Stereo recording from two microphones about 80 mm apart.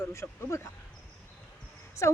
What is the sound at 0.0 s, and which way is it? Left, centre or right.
Speech, left.